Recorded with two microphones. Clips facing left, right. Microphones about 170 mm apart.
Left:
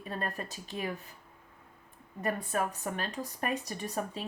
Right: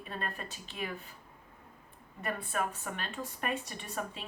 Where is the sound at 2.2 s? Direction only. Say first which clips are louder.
Left 3 dB; 40° left (ahead or behind).